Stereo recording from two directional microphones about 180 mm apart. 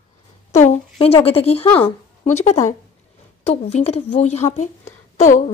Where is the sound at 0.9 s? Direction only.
30° left (ahead or behind).